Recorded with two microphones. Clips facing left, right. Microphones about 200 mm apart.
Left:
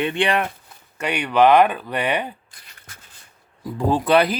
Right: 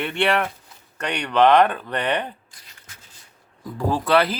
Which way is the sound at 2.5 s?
60° left (ahead or behind).